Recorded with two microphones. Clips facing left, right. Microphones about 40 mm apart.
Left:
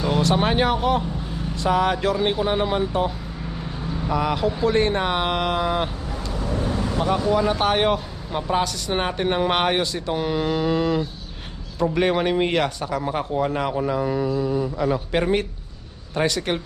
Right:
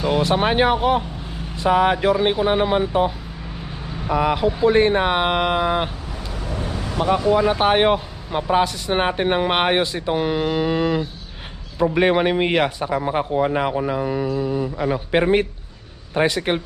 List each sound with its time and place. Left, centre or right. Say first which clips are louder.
0.0 s speech: right 2 dB; centre
4.1 s speech: right 4 dB; centre
6.9 s speech: right 4 dB; centre